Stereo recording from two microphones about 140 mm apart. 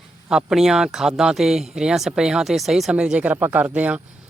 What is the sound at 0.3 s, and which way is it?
Speech, 5° right (ahead or behind).